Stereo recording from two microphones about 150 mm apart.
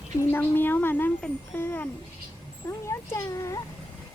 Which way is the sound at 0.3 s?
15° left (ahead or behind).